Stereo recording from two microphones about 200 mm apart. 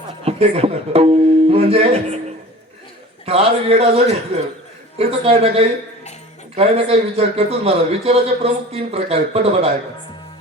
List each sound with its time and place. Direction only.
0.3 s speech: 30° right (ahead or behind)
3.2 s a man's voice: 30° right (ahead or behind)